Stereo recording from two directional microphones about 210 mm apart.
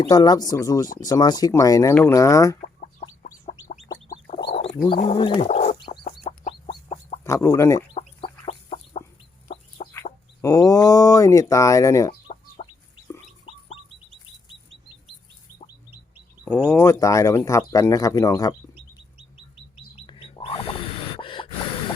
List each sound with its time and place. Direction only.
0.1 s speech: 20° left (ahead or behind)
2.6 s chicken: 40° left (ahead or behind)
4.5 s bird: 25° left (ahead or behind)
4.9 s speech: 25° left (ahead or behind)
5.5 s chicken: 30° left (ahead or behind)
7.3 s speech: 15° left (ahead or behind)
8.4 s chicken: 30° left (ahead or behind)
9.9 s speech: 15° left (ahead or behind)
12.6 s chicken: 30° left (ahead or behind)
16.4 s speech: 5° right (ahead or behind)
16.6 s speech: 15° left (ahead or behind)
20.1 s bird: 25° left (ahead or behind)